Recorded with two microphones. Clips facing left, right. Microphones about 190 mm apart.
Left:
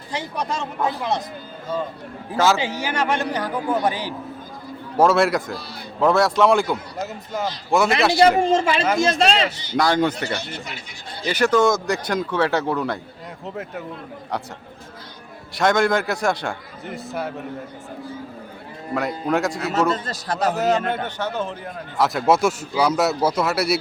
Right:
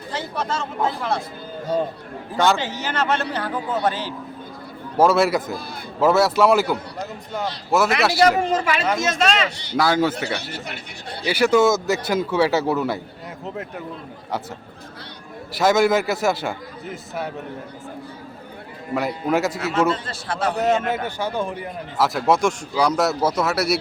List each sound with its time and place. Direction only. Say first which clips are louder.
0.1 s a man's voice: even; 15° left (ahead or behind)
2.3 s a man's voice: left 1 dB; centre (ahead or behind)
4.9 s a man's voice: even; centre (ahead or behind)
8.4 s speech: left 3 dB; 30° left (ahead or behind)
8.8 s a man's voice: left 3 dB; centre (ahead or behind)
9.0 s a man's voice: left 2 dB; 30° left (ahead or behind)
9.7 s a man's voice: even; 5° right (ahead or behind)
11.3 s a man's voice: right 1 dB; 10° right (ahead or behind)
15.5 s a man's voice: right 2 dB; 5° right (ahead or behind)
18.9 s a man's voice: right 1 dB; centre (ahead or behind)
19.9 s a man's voice: left 1 dB; 40° left (ahead or behind)
20.6 s a man's voice: even; centre (ahead or behind)
22.0 s a man's voice: left 1 dB; centre (ahead or behind)